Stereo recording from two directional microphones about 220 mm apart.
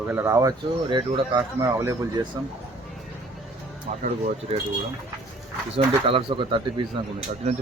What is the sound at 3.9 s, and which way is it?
Speech, 30° right (ahead or behind).